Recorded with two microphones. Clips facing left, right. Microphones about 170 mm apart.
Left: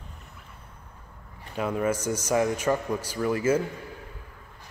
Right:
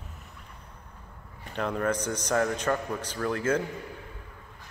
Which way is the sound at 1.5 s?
5° left (ahead or behind).